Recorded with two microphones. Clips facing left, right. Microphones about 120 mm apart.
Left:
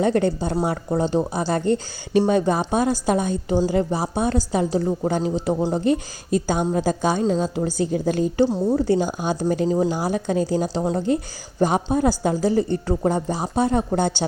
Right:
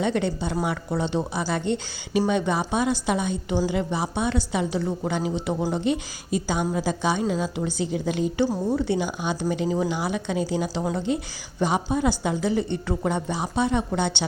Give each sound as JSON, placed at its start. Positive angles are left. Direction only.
{"t": 0.0, "sound": "a woman's voice", "side_deg": 45}